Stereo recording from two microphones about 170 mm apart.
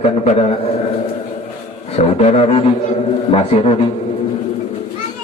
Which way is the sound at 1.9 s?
40° left (ahead or behind).